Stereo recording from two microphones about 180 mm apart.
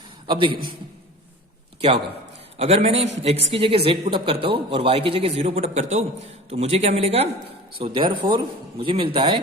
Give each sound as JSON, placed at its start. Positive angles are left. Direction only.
{"t": 0.3, "sound": "a man's voice", "side_deg": -25}
{"t": 2.6, "sound": "a man's voice", "side_deg": -35}